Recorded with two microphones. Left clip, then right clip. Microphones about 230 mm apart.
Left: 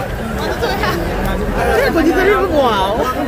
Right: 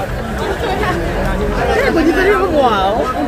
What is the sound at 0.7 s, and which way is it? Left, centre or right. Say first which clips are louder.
Chatter: right 2 dB; left.